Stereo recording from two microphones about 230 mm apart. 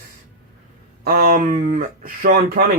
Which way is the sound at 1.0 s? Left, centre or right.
Right.